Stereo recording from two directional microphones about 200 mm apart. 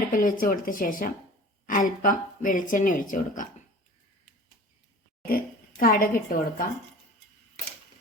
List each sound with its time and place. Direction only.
0.1 s speech: 40° left (ahead or behind)
5.2 s a woman's voice: 45° left (ahead or behind)